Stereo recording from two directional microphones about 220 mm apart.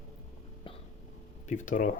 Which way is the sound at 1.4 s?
35° left (ahead or behind).